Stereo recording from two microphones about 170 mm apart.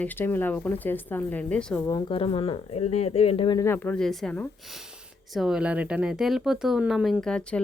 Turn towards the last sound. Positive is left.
turn(degrees=5)  # may be behind; listen again after turning